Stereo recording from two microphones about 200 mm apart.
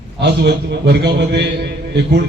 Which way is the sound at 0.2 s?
60° right (ahead or behind).